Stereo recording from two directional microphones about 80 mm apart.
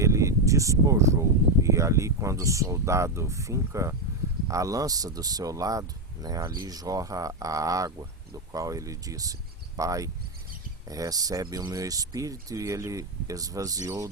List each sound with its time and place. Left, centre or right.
0.0 s speech: right